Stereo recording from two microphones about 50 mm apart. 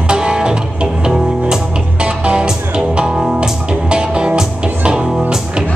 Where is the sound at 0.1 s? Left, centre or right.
Centre.